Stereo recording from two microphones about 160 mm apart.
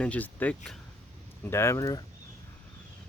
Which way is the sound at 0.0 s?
10° left (ahead or behind).